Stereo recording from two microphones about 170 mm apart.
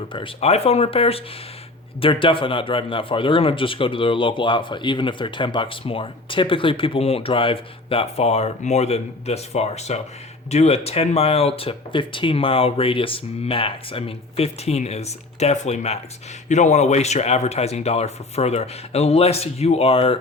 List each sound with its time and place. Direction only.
0.1 s a man's voice: 35° left (ahead or behind)